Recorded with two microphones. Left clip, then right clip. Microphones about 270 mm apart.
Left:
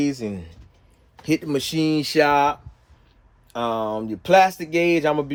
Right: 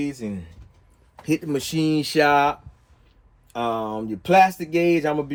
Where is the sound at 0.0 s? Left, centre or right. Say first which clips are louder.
Left 4 dB; left.